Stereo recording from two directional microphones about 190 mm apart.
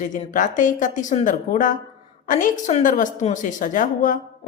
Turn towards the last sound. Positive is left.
turn(degrees=45)  # may be behind; listen again after turning